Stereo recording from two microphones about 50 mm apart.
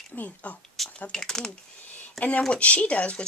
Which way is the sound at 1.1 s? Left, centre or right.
Centre.